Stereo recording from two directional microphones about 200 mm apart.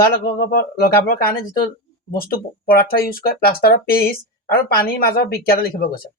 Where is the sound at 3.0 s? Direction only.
50° left (ahead or behind).